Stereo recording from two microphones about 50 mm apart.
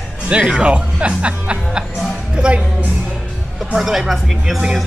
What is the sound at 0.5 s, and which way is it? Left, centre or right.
Speech, right.